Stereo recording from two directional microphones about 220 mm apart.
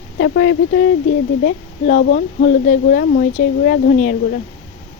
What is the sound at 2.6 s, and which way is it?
Speech, 45° left (ahead or behind).